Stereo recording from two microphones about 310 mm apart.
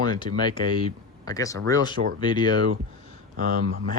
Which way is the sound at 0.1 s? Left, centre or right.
Centre.